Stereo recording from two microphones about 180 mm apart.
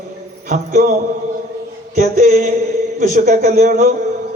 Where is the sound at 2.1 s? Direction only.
45° right (ahead or behind).